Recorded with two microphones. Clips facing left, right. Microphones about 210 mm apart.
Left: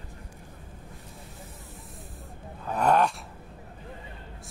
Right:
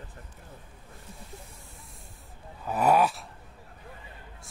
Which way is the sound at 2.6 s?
5° right (ahead or behind).